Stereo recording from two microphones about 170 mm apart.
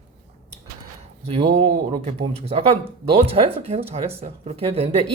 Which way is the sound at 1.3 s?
35° right (ahead or behind).